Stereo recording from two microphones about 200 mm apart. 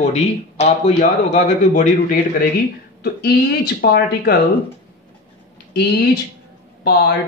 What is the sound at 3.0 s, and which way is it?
Speech, 50° left (ahead or behind).